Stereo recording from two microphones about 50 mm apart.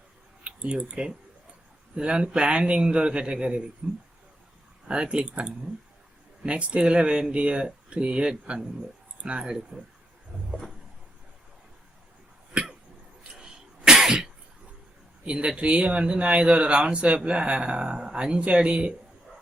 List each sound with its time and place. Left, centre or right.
0.4 s speech: right
13.3 s cough: centre
15.2 s speech: right